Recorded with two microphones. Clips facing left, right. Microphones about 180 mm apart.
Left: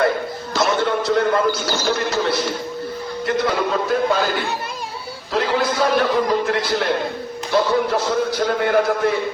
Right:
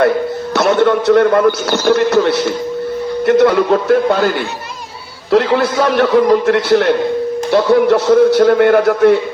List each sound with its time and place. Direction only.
0.5 s a man's voice: 70° right (ahead or behind)
5.3 s a man's voice: 70° right (ahead or behind)